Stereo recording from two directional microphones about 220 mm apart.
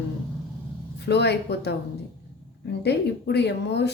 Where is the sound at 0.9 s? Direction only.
50° left (ahead or behind).